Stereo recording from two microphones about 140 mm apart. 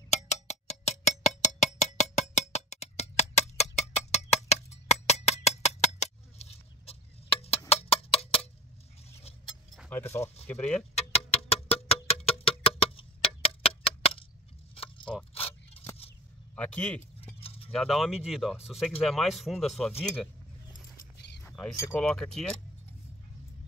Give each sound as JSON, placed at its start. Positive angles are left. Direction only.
{"t": 0.1, "sound": "a sound", "side_deg": 55}
{"t": 7.7, "sound": "chicken", "side_deg": 45}
{"t": 9.1, "sound": "a sound", "side_deg": 45}
{"t": 9.8, "sound": "speech", "side_deg": 15}
{"t": 11.0, "sound": "music", "side_deg": 45}
{"t": 13.4, "sound": "a sound", "side_deg": 45}
{"t": 15.3, "sound": "coin", "side_deg": 45}
{"t": 16.5, "sound": "speech", "side_deg": 10}
{"t": 17.4, "sound": "keys jangling", "side_deg": 45}
{"t": 17.6, "sound": "speech", "side_deg": 0}
{"t": 21.7, "sound": "speech", "side_deg": 20}
{"t": 22.0, "sound": "speech", "side_deg": 5}